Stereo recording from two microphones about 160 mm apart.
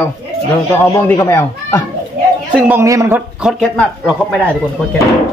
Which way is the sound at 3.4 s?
Centre (ahead or behind).